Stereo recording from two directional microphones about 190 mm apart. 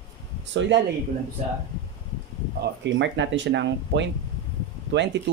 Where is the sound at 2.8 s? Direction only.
70° right (ahead or behind).